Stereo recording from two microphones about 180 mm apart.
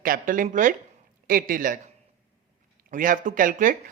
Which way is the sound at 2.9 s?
45° right (ahead or behind).